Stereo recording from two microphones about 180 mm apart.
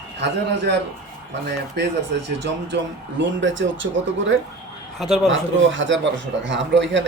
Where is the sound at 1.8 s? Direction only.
75° right (ahead or behind).